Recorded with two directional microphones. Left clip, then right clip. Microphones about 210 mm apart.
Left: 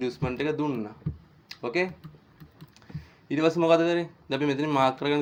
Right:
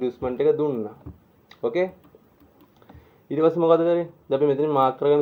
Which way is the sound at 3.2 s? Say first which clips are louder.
Right 4 dB; 30° left (ahead or behind).